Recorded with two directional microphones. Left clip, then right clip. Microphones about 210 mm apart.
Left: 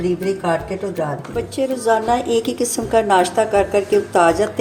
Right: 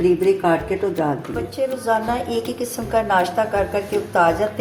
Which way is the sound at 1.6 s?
50° left (ahead or behind).